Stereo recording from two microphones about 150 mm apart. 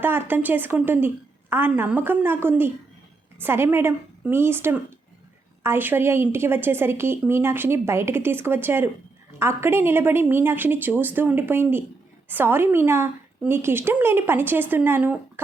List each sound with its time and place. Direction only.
0.0 s a woman's voice: 15° right (ahead or behind)